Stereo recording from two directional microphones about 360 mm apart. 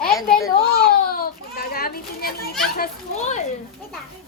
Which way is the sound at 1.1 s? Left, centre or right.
Left.